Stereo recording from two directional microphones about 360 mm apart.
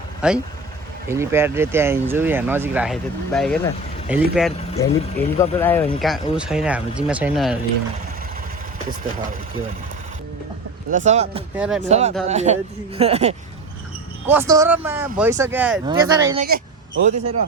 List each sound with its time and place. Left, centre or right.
0.2 s speech: centre
10.9 s speech: centre
11.5 s speech: centre
11.9 s speech: centre